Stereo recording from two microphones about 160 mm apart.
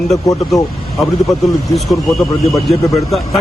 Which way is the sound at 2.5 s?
Centre (ahead or behind).